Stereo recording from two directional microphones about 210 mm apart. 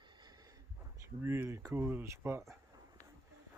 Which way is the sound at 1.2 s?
10° right (ahead or behind).